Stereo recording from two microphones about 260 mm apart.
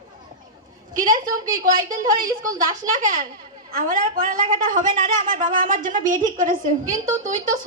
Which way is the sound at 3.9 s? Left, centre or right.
Right.